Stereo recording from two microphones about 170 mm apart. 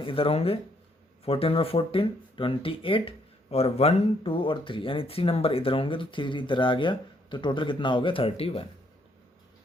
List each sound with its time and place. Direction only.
0.0 s speech: 30° left (ahead or behind)